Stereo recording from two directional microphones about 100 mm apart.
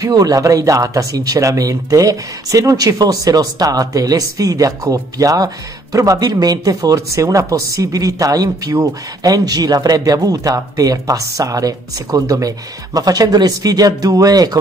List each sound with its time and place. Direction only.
0.0 s speech: 40° right (ahead or behind)